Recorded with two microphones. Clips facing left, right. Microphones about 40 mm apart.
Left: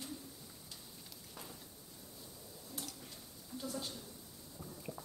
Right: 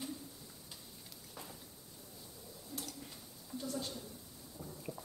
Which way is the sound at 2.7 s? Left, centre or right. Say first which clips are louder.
Right 2 dB; centre.